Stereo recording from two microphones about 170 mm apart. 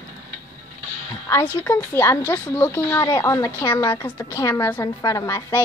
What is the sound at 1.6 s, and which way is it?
Speech, 10° left (ahead or behind).